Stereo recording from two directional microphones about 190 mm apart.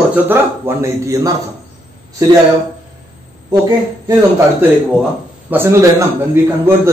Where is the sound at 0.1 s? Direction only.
10° right (ahead or behind).